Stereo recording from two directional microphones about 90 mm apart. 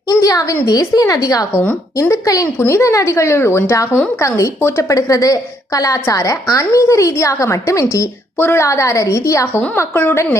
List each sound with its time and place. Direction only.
0.1 s a sound: 40° left (ahead or behind)
0.6 s a woman's voice: 45° left (ahead or behind)
8.4 s a woman's voice: 25° left (ahead or behind)
8.6 s a woman's voice: 35° left (ahead or behind)
9.7 s a woman's voice: 20° left (ahead or behind)